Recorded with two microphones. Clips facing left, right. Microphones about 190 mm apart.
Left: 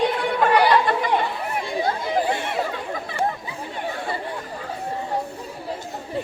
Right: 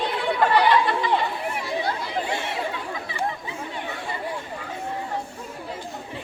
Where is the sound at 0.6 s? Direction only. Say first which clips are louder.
Left 2 dB; 45° left (ahead or behind).